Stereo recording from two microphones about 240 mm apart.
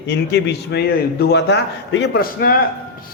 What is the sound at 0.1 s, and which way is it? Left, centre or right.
A man's voice, left.